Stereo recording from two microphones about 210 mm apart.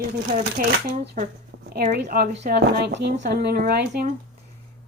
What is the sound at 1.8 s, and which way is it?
A woman's voice, 45° right (ahead or behind).